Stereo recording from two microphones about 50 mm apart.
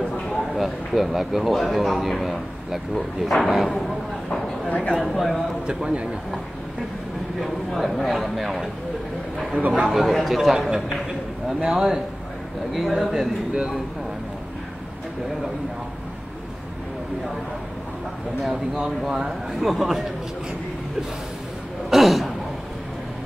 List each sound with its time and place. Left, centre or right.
0.2 s a man's voice: centre
4.6 s speech: left
5.0 s speech: centre
5.7 s a man's voice: right
7.3 s speech: centre
9.6 s a man's voice: right
9.8 s speech: centre
13.0 s speech: centre
18.9 s speech: centre
21.9 s a sound: centre